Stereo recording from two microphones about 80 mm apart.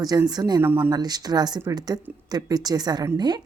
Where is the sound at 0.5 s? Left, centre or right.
Right.